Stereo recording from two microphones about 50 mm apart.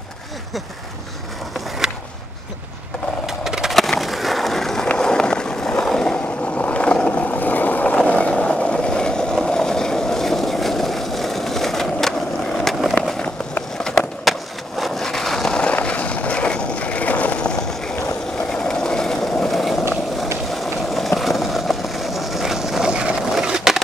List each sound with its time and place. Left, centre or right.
3.3 s a sound: centre
3.7 s skateboard: centre
5.9 s vehicle: centre
6.5 s vehicle: left; by 12.1 s centre
14.3 s skateboard: centre
14.8 s vehicle: centre
15.6 s skateboard: left
18.5 s vehicle: centre
23.4 s skateboard: centre